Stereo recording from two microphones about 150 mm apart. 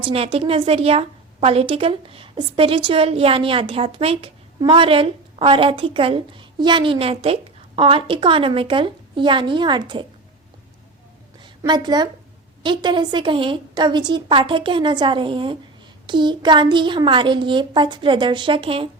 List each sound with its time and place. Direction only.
0.0 s a woman's voice: 40° right (ahead or behind)
11.3 s a sound: 30° right (ahead or behind)
12.6 s a woman's voice: 30° right (ahead or behind)